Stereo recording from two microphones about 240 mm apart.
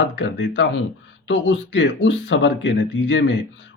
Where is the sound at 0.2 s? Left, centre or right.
Left.